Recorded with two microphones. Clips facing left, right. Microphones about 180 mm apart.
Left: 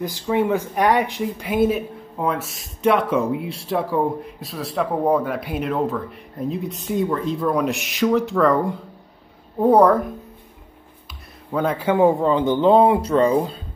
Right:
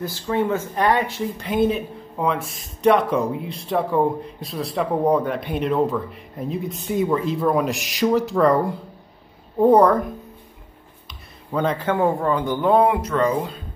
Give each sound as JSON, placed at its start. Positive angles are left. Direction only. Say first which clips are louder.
{"t": 0.0, "sound": "speech", "louder": "left 2 dB", "side_deg": 15}